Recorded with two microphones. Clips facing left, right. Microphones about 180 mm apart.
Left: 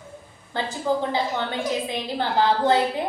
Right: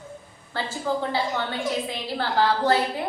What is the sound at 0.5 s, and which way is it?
A woman's voice, 20° left (ahead or behind).